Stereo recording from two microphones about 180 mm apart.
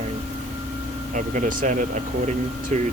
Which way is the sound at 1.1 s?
45° right (ahead or behind).